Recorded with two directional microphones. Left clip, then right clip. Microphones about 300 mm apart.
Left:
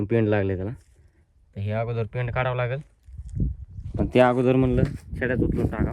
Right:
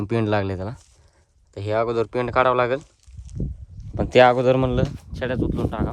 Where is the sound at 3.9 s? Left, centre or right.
Right.